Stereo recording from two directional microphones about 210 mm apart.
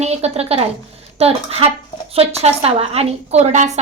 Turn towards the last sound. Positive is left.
turn(degrees=-35)  # may be behind; listen again after turning